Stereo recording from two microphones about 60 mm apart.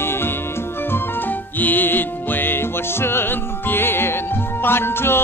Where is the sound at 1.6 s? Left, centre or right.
Left.